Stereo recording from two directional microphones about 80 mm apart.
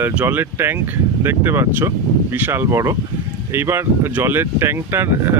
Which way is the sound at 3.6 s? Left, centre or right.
Right.